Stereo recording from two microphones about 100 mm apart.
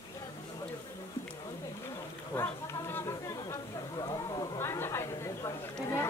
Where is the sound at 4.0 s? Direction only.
45° left (ahead or behind).